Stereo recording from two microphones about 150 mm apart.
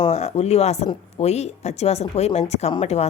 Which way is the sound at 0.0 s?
45° left (ahead or behind).